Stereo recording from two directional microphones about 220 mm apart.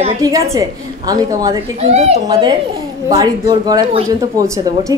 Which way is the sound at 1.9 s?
30° right (ahead or behind).